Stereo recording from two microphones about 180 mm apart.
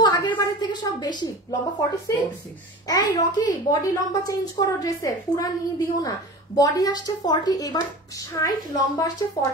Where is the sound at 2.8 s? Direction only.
20° left (ahead or behind).